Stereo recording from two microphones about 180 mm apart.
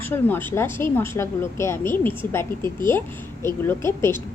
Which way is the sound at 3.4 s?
15° left (ahead or behind).